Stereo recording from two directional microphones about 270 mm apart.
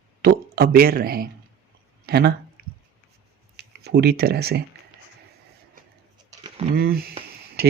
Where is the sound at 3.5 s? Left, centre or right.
Right.